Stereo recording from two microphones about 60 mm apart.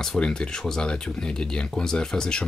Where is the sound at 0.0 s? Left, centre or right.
Centre.